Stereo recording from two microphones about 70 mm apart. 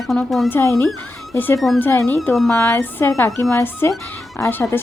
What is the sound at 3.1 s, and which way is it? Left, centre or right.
Speech, left.